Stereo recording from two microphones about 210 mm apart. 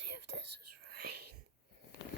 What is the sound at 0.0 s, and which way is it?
Whispering, 55° right (ahead or behind).